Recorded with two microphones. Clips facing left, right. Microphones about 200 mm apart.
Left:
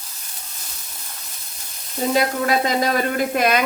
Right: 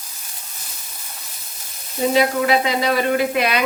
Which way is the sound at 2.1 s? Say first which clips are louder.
Right 2 dB; 45° left (ahead or behind).